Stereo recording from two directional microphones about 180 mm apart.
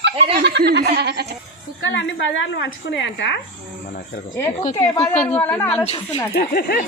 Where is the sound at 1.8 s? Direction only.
90° left.